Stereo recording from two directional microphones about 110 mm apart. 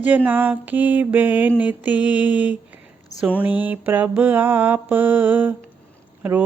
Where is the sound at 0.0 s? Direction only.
15° right (ahead or behind).